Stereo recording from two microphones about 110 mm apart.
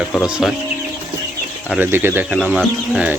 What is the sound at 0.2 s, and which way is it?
Speech, 5° right (ahead or behind).